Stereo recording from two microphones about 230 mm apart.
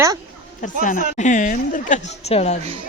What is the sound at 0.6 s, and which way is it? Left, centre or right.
Speech, left.